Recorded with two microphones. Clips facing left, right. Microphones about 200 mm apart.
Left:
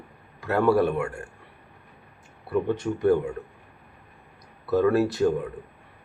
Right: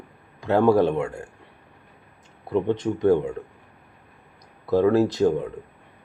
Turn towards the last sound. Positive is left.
turn(degrees=-20)  # may be behind; listen again after turning